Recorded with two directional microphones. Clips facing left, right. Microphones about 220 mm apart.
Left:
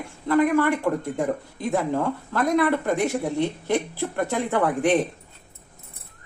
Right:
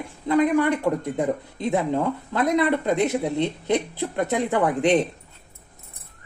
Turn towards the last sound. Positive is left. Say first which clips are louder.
# right 1 dB
turn(degrees=-20)  # may be behind; listen again after turning